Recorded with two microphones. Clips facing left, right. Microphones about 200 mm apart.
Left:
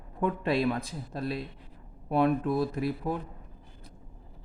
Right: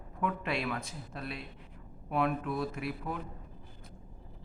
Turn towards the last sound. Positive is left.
turn(degrees=35)  # may be behind; listen again after turning